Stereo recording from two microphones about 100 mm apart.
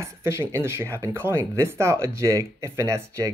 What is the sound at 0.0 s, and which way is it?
Speech, 30° right (ahead or behind).